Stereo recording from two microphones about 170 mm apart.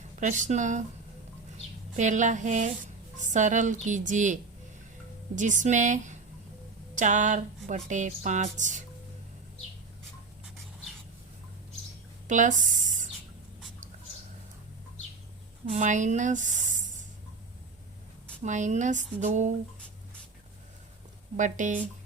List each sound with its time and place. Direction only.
0.2 s speech: 45° right (ahead or behind)
2.0 s speech: 45° right (ahead or behind)
12.3 s speech: 50° right (ahead or behind)
15.7 s speech: 45° right (ahead or behind)
18.4 s speech: 45° right (ahead or behind)
21.3 s speech: 45° right (ahead or behind)